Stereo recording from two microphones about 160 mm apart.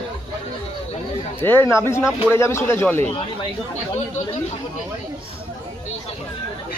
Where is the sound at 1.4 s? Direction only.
15° left (ahead or behind).